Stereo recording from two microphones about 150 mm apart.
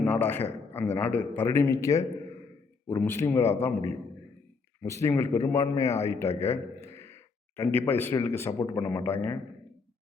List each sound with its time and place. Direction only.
0.0 s a man's voice: 10° left (ahead or behind)
4.8 s a man's voice: 20° left (ahead or behind)